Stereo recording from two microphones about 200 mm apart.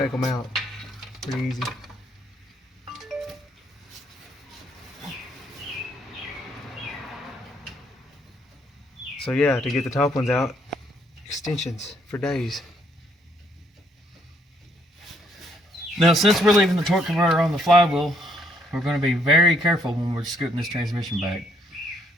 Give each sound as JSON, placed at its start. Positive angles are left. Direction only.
{"t": 0.2, "sound": "a sound", "side_deg": 0}
{"t": 2.9, "sound": "music", "side_deg": 0}
{"t": 9.2, "sound": "speech", "side_deg": 5}
{"t": 11.3, "sound": "speech", "side_deg": 35}
{"t": 12.1, "sound": "speech", "side_deg": 0}
{"t": 16.0, "sound": "speech", "side_deg": 0}